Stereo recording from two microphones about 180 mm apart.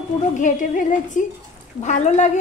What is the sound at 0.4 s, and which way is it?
Dishes, 45° left (ahead or behind).